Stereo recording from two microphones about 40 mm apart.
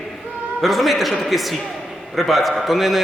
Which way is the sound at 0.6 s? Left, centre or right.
Centre.